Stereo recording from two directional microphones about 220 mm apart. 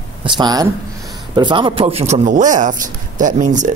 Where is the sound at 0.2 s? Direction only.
20° right (ahead or behind).